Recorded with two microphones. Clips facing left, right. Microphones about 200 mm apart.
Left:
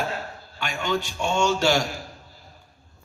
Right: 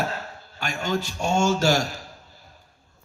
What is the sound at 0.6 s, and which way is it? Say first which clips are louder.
A man's voice: even; 40° right (ahead or behind).